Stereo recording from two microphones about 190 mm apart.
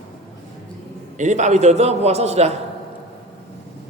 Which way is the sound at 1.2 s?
40° right (ahead or behind).